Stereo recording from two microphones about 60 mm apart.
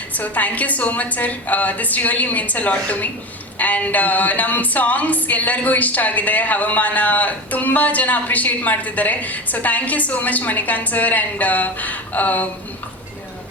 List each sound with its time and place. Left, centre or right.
0.1 s music: left